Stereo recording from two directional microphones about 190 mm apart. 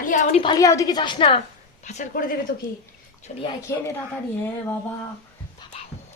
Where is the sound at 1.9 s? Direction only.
45° left (ahead or behind).